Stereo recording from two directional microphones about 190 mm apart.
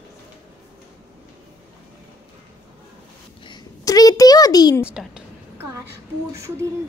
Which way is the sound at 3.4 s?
20° left (ahead or behind).